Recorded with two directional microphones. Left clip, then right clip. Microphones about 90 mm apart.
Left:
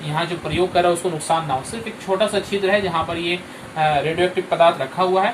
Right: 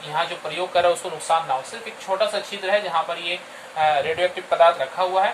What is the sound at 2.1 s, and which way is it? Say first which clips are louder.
Speech: left 2 dB; 15° right (ahead or behind).